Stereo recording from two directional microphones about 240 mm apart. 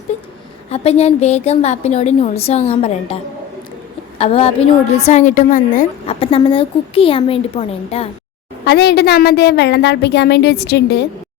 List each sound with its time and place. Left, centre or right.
0.7 s a woman's voice: left
4.2 s a woman's voice: left
8.6 s a woman's voice: left